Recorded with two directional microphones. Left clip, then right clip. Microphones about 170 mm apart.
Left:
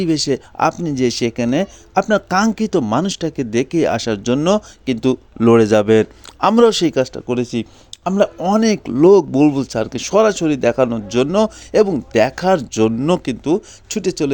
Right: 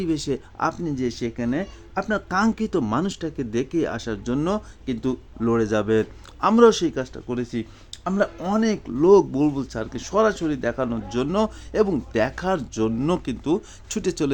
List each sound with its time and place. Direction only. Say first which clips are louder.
0.0 s speech: left 8 dB; 40° left (ahead or behind); by 14.3 s 20° left (ahead or behind)